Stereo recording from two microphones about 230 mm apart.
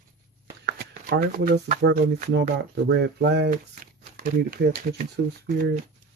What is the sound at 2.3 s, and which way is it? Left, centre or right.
Speech, right.